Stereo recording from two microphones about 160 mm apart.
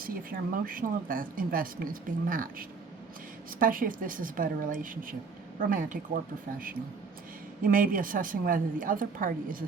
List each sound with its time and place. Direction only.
0.0 s speech: 60° right (ahead or behind)
7.6 s speech: 60° right (ahead or behind)